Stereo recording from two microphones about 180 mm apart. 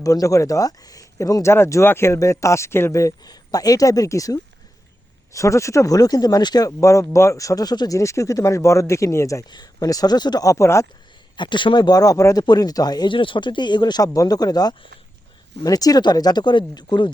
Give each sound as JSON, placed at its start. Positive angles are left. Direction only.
{"t": 0.0, "sound": "speech", "side_deg": 20}